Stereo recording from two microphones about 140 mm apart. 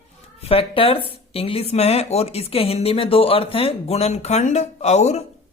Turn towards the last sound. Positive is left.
turn(degrees=55)  # may be behind; listen again after turning